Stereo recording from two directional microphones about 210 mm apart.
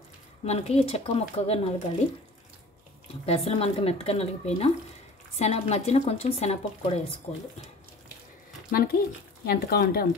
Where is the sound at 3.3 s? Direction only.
30° left (ahead or behind).